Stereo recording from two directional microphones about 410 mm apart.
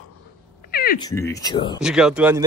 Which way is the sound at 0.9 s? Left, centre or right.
Centre.